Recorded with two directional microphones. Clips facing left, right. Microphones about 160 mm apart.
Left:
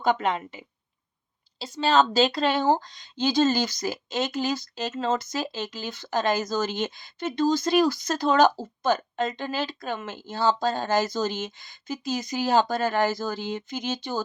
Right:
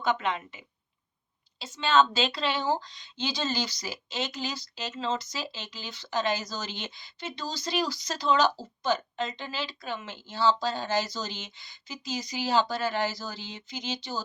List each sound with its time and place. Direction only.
0.0 s a woman's voice: 40° left (ahead or behind)